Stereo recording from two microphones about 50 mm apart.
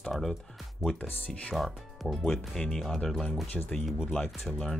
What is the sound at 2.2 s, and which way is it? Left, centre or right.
Speech, centre.